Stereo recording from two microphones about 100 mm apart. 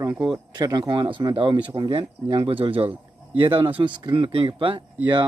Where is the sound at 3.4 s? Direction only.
60° right (ahead or behind).